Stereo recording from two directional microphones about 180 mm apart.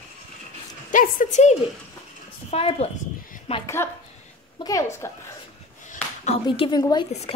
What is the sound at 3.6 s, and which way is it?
A woman's voice, 15° left (ahead or behind).